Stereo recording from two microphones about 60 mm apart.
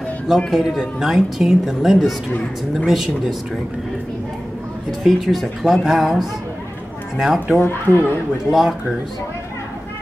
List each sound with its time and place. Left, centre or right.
0.5 s speech: centre
5.0 s speech: centre
7.6 s speech: left
8.5 s speech: centre